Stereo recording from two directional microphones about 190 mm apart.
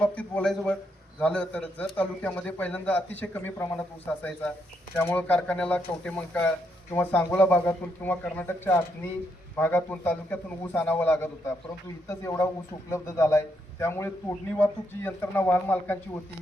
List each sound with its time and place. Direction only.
0.0 s a man's voice: 5° left (ahead or behind)